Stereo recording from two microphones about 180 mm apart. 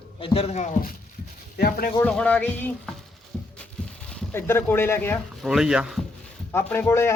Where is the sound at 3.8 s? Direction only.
5° left (ahead or behind).